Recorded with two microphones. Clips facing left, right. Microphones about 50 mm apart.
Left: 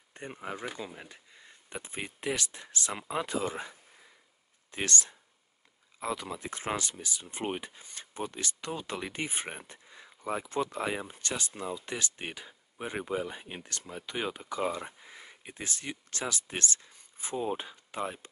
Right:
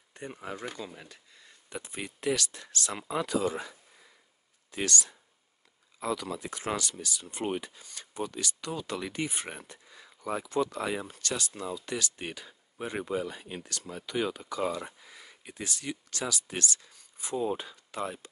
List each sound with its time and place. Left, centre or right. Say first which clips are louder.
0.1 s speech: even; left